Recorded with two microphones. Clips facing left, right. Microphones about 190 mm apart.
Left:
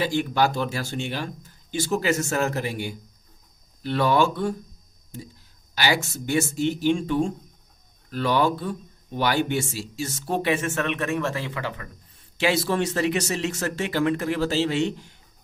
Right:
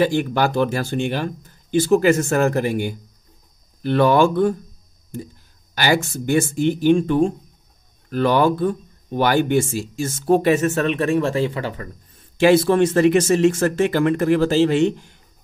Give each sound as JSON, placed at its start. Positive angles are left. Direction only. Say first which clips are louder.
{"t": 0.0, "sound": "speech", "louder": "right 4 dB", "side_deg": -55}
{"t": 5.8, "sound": "speech", "louder": "right 5 dB", "side_deg": -50}
{"t": 12.2, "sound": "speech", "louder": "right 9 dB", "side_deg": -50}